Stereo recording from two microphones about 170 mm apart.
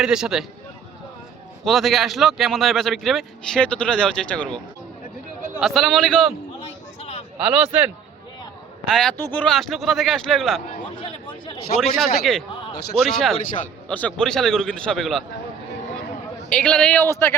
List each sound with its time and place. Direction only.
0.0 s speech: 5° right (ahead or behind)
1.6 s speech: centre (ahead or behind)
7.4 s speech: 5° right (ahead or behind)
8.9 s speech: 5° left (ahead or behind)
11.0 s a sound: 35° left (ahead or behind)
11.8 s speech: centre (ahead or behind)
16.5 s a man's voice: 5° left (ahead or behind)